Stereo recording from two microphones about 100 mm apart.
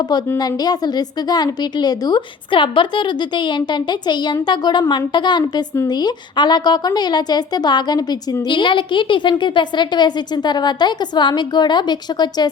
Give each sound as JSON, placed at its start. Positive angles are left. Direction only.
{"t": 0.3, "sound": "a woman's voice", "side_deg": 40}